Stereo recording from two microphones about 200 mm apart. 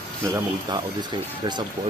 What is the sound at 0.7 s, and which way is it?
Speech, 20° right (ahead or behind).